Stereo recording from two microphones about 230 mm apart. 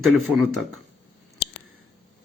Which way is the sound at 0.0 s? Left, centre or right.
Centre.